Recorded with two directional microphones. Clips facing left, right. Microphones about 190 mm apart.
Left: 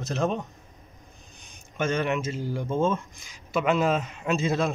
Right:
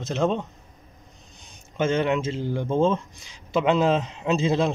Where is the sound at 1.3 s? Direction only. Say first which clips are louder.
Right 4 dB; 20° right (ahead or behind).